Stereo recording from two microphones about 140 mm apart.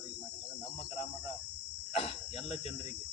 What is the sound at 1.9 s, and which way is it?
Speech, 45° left (ahead or behind).